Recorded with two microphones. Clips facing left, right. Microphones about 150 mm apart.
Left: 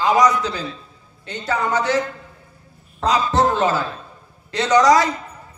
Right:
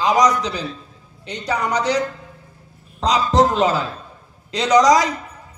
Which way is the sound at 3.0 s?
20° right (ahead or behind).